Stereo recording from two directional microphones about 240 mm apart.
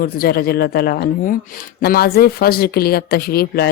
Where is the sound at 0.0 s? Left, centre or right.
Left.